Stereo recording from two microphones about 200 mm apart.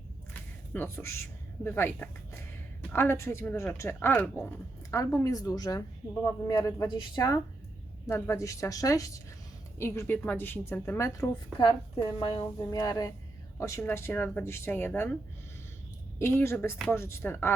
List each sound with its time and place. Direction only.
0.7 s a woman's voice: 10° left (ahead or behind)
12.2 s a woman's voice: 25° left (ahead or behind)
16.1 s a woman's voice: 15° left (ahead or behind)